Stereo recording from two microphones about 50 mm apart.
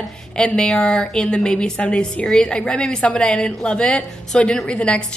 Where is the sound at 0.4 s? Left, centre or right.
Centre.